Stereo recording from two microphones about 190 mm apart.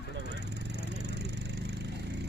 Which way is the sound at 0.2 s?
60° right (ahead or behind).